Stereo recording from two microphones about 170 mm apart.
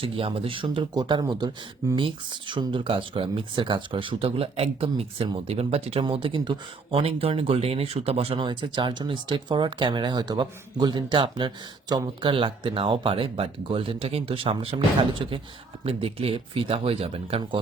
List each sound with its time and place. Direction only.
0.0 s speech: 30° right (ahead or behind)